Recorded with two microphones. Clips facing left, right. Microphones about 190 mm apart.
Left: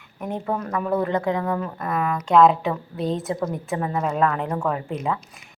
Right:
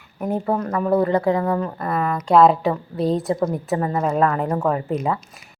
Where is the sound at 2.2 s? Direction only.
35° right (ahead or behind).